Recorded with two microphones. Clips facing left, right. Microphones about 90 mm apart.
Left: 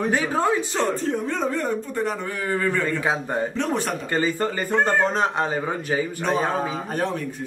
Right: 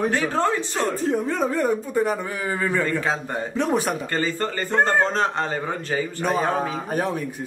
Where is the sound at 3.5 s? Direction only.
10° right (ahead or behind).